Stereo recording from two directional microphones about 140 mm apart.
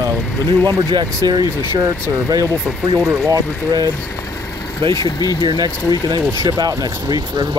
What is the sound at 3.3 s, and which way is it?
Speech, 25° right (ahead or behind).